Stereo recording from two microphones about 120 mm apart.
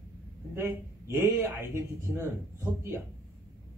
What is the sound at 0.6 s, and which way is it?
A man's voice, 20° right (ahead or behind).